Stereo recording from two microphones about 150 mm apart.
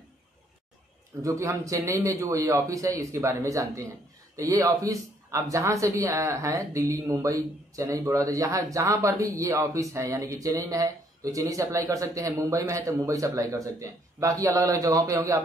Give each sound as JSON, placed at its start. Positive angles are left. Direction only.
{"t": 1.2, "sound": "speech", "side_deg": -20}